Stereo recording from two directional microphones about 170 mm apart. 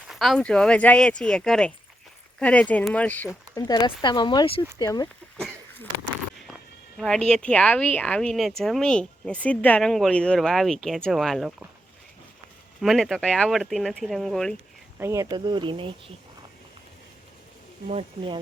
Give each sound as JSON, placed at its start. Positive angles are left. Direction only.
{"t": 0.1, "sound": "speech", "side_deg": 0}
{"t": 6.5, "sound": "a sound", "side_deg": 0}
{"t": 7.3, "sound": "speech", "side_deg": 5}
{"t": 12.8, "sound": "speech", "side_deg": 0}
{"t": 14.9, "sound": "speech", "side_deg": -15}
{"t": 17.8, "sound": "speech", "side_deg": -35}